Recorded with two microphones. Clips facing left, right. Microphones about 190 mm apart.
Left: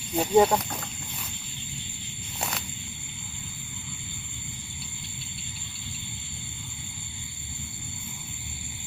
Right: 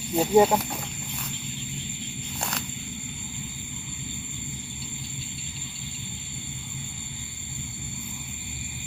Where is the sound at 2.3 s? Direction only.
5° left (ahead or behind).